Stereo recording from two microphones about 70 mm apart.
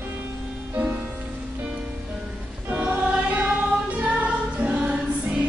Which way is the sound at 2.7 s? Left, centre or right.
Right.